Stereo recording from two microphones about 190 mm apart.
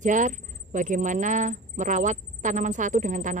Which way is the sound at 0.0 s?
40° right (ahead or behind).